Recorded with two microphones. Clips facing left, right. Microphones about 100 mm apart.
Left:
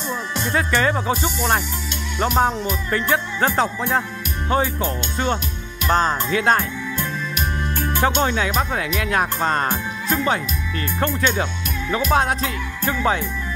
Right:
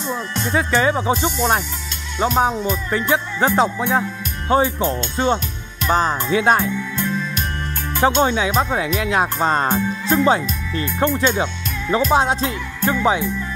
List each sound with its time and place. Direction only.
0.1 s music: 10° right (ahead or behind)
1.2 s speech: 20° right (ahead or behind)
2.3 s music: 5° right (ahead or behind)
2.9 s music: 15° right (ahead or behind)
4.5 s speech: 20° right (ahead or behind)
5.9 s music: 5° right (ahead or behind)
6.2 s music: 20° right (ahead or behind)
8.0 s speech: 20° right (ahead or behind)
13.0 s music: 15° right (ahead or behind)